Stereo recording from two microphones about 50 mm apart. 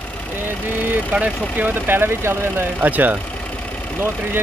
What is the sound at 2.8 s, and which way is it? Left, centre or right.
Speech, right.